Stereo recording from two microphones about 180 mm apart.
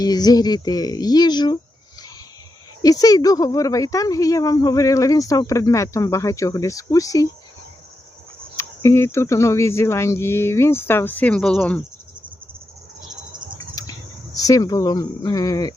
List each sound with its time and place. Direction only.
0.0 s speech: 20° left (ahead or behind)
2.8 s speech: 20° left (ahead or behind)
8.5 s speech: 15° left (ahead or behind)
14.3 s speech: 20° left (ahead or behind)